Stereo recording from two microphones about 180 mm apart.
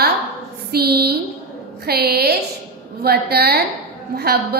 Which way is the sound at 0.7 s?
60° right (ahead or behind).